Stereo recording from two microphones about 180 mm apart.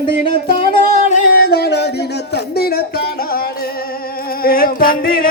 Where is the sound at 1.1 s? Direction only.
55° left (ahead or behind).